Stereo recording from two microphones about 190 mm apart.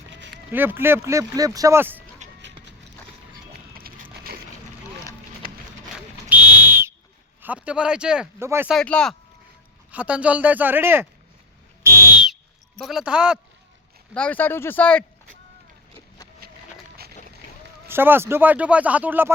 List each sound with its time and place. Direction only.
0.5 s speech: 10° right (ahead or behind)
3.3 s a sound: 50° right (ahead or behind)
5.4 s a sound: 50° right (ahead or behind)
6.2 s whistle: 10° right (ahead or behind)
7.4 s speech: 5° right (ahead or behind)
8.7 s speech: 5° left (ahead or behind)
9.9 s speech: 5° right (ahead or behind)
12.8 s speech: centre (ahead or behind)
14.1 s speech: 10° left (ahead or behind)
17.8 s speech: 10° right (ahead or behind)